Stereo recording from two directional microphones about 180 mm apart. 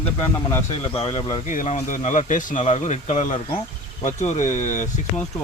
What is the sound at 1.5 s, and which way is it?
Speech, 45° left (ahead or behind).